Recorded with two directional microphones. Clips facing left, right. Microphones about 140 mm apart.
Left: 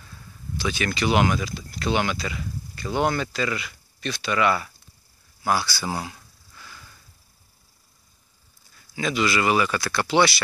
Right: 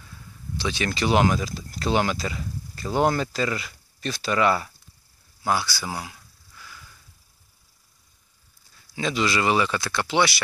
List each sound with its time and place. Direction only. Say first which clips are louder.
0.6 s speech: even; 30° right (ahead or behind)
5.4 s speech: left 1 dB; 20° right (ahead or behind)
6.0 s a sound: left 4 dB; centre (ahead or behind)
8.9 s speech: left 1 dB; 30° right (ahead or behind)